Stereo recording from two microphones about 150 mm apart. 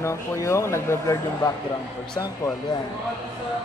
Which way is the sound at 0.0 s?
20° left (ahead or behind).